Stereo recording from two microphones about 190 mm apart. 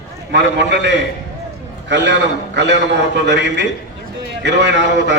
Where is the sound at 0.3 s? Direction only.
65° right (ahead or behind).